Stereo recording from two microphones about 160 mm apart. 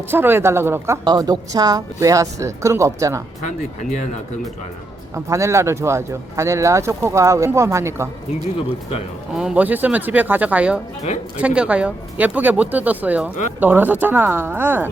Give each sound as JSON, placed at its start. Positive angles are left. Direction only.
{"t": 0.1, "sound": "speech", "side_deg": -15}
{"t": 1.0, "sound": "speech", "side_deg": -25}
{"t": 3.4, "sound": "speech", "side_deg": 50}
{"t": 5.1, "sound": "speech", "side_deg": -20}
{"t": 9.4, "sound": "speech", "side_deg": -10}